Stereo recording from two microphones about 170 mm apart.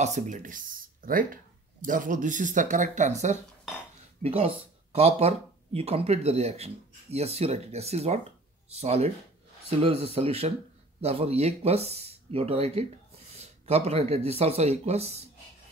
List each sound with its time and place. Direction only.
0.0 s speech: 45° right (ahead or behind)